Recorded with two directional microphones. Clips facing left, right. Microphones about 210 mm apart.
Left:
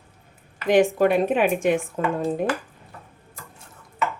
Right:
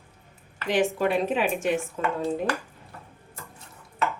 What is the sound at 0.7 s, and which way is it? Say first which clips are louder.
A woman's voice: left 6 dB; 50° left (ahead or behind).